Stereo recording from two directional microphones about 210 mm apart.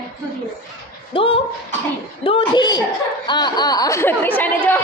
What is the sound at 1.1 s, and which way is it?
Speech, 25° left (ahead or behind).